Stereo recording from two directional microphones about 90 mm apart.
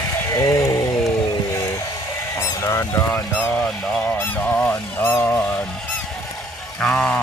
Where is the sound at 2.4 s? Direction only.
40° left (ahead or behind).